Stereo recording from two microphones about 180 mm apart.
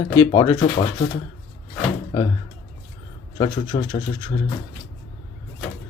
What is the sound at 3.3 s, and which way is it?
Speech, 25° left (ahead or behind).